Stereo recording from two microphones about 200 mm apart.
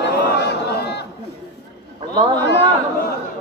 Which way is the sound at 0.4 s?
55° left (ahead or behind).